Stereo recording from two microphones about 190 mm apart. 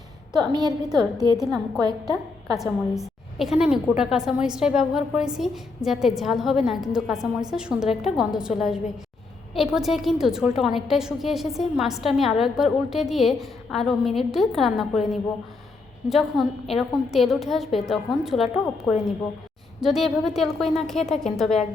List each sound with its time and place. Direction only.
0.3 s a woman's voice: 20° right (ahead or behind)
1.4 s a woman's voice: centre (ahead or behind)
1.8 s a woman's voice: 20° right (ahead or behind)
2.6 s a woman's voice: centre (ahead or behind)